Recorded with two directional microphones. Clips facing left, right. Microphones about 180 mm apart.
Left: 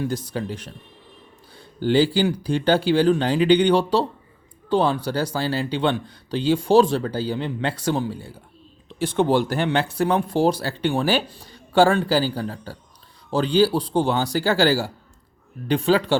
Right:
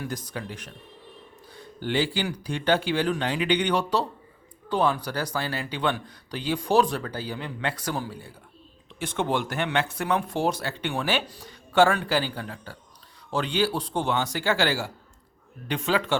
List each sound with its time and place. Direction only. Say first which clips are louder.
0.0 s speech: left 7 dB; 30° left (ahead or behind)